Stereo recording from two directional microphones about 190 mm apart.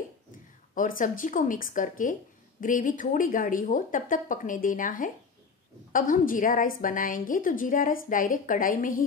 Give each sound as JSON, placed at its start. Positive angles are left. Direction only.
{"t": 0.7, "sound": "a woman's voice", "side_deg": 45}